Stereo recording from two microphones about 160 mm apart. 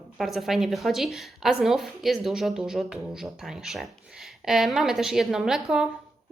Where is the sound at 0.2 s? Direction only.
Centre (ahead or behind).